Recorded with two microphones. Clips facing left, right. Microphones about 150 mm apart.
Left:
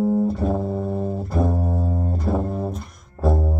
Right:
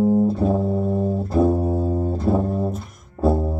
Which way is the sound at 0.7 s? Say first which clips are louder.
Right 3 dB; 30° right (ahead or behind).